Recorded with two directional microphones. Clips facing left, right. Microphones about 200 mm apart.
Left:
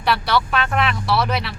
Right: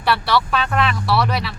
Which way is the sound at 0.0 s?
Centre (ahead or behind).